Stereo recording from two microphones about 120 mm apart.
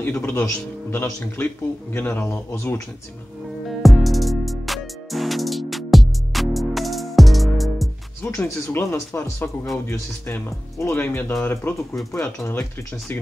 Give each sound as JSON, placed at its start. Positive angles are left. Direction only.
{"t": 0.0, "sound": "speech", "side_deg": 15}
{"t": 3.8, "sound": "music", "side_deg": 0}
{"t": 8.7, "sound": "speech", "side_deg": 20}